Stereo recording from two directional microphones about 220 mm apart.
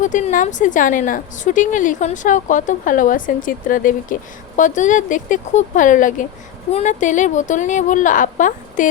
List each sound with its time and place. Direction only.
0.0 s a woman's voice: 35° left (ahead or behind)